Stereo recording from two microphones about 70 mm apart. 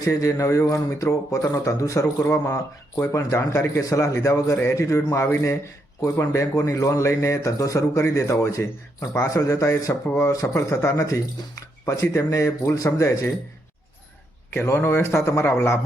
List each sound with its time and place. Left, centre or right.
0.0 s a man's voice: left
14.5 s a man's voice: left